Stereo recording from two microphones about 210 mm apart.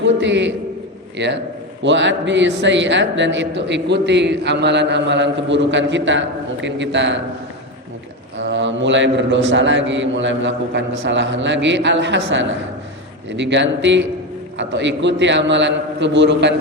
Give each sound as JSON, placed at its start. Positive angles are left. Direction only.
{"t": 0.0, "sound": "a sound", "side_deg": -60}
{"t": 1.1, "sound": "a man's voice", "side_deg": -60}
{"t": 8.4, "sound": "a man's voice", "side_deg": -60}